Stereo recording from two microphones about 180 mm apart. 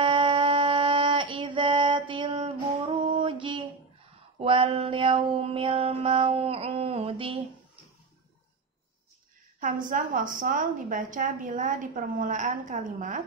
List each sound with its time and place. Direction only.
0.0 s female singing: 30° right (ahead or behind)
4.4 s mantra: 30° right (ahead or behind)
9.6 s a woman's voice: 50° right (ahead or behind)